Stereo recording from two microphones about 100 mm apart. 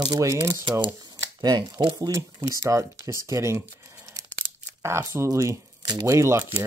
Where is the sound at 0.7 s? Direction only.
50° right (ahead or behind).